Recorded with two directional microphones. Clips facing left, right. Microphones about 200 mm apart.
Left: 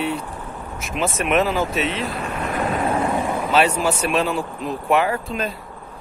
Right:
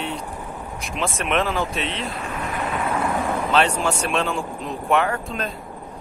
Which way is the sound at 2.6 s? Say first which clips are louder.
Left 4 dB; 40° left (ahead or behind).